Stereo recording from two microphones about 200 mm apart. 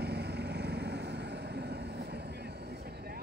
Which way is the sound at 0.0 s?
55° right (ahead or behind).